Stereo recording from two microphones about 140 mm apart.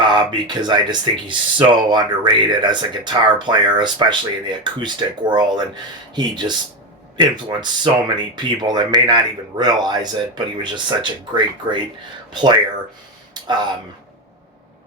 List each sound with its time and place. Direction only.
0.0 s speech: 35° right (ahead or behind)